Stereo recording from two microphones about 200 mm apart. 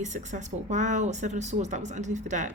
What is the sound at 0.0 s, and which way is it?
Speech, 35° right (ahead or behind).